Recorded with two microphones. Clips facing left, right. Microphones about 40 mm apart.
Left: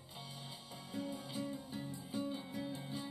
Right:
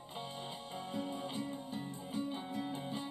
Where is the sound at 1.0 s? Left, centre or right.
Right.